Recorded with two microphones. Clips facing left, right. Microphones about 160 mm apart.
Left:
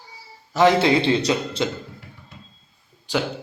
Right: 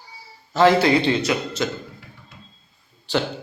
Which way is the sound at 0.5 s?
20° left (ahead or behind).